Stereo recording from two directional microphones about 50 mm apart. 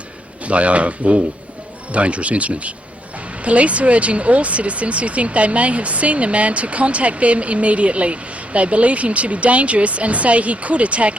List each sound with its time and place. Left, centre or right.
0.4 s speech: right